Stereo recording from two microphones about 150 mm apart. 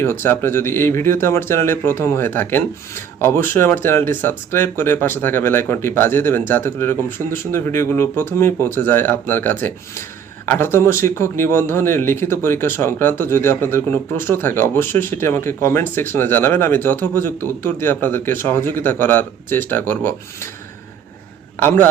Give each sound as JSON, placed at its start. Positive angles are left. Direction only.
{"t": 0.0, "sound": "speech", "side_deg": 15}
{"t": 21.6, "sound": "speech", "side_deg": 15}